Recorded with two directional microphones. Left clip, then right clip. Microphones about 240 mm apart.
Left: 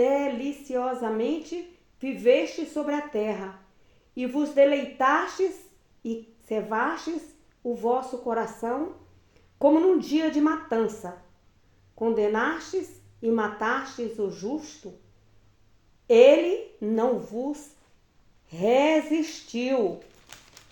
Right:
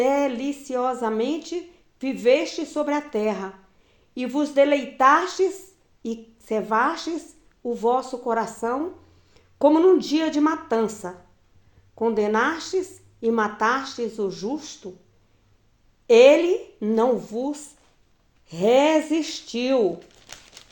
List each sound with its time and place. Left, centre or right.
0.0 s a woman's voice: right
16.0 s a woman's voice: right
20.2 s a sound: right